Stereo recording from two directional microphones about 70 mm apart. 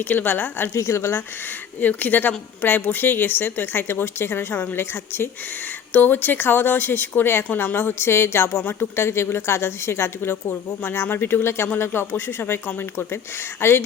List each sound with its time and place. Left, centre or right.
0.0 s a woman's voice: left
0.7 s a woman's voice: left
1.8 s a woman's voice: left